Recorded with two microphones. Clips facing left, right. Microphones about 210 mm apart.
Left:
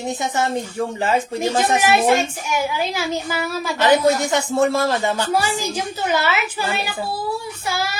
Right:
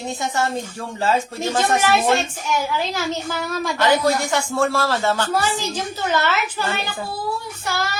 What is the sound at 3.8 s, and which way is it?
A woman's voice, 20° left (ahead or behind).